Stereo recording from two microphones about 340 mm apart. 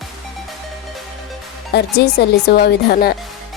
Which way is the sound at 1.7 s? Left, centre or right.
Left.